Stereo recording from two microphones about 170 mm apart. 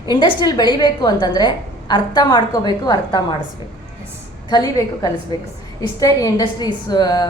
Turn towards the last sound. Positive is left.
turn(degrees=25)  # may be behind; listen again after turning